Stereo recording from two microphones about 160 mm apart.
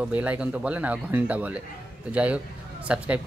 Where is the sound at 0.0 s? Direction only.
10° right (ahead or behind).